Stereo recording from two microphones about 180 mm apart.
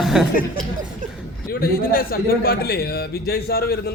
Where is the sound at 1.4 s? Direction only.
55° left (ahead or behind).